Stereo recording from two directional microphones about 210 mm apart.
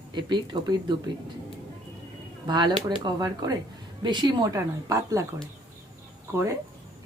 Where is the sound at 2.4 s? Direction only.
20° right (ahead or behind).